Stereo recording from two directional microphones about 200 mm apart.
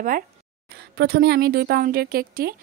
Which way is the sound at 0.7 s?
55° right (ahead or behind).